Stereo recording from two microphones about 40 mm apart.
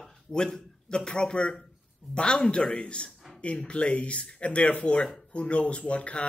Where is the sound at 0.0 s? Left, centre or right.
Centre.